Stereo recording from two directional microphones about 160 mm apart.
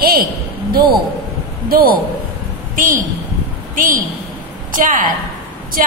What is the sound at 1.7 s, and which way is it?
A woman's voice, 65° right (ahead or behind).